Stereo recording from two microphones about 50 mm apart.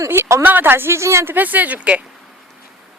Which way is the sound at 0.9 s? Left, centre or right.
Right.